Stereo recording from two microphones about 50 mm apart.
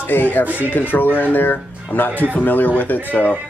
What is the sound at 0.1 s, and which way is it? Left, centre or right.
Speech, left.